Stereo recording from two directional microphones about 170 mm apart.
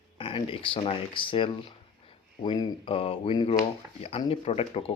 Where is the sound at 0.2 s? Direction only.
30° left (ahead or behind).